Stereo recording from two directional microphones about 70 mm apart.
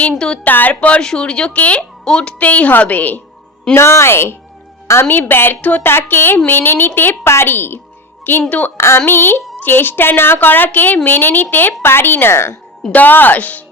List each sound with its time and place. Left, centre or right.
0.4 s a woman's voice: left
3.8 s a woman's voice: left
12.9 s a woman's voice: left